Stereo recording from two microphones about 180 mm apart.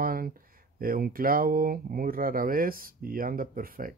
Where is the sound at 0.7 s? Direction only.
55° right (ahead or behind).